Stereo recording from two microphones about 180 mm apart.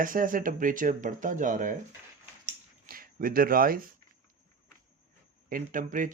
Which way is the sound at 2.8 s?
50° right (ahead or behind).